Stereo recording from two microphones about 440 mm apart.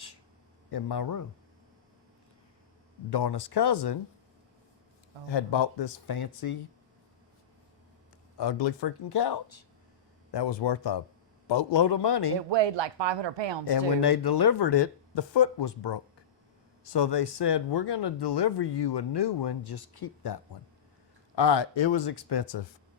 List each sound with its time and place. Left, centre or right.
0.7 s speech: left
3.1 s speech: left
5.3 s speech: left
8.4 s speech: left
10.3 s speech: left
11.4 s speech: left
12.5 s speech: right
13.7 s speech: left
21.3 s speech: left